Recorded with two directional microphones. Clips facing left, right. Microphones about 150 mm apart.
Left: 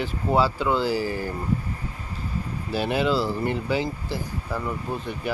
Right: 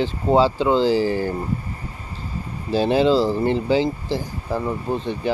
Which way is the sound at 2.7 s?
30° right (ahead or behind).